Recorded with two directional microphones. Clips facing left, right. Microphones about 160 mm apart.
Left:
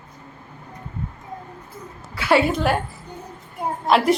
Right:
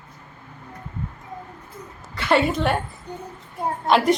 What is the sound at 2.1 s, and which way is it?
Speech, 5° left (ahead or behind).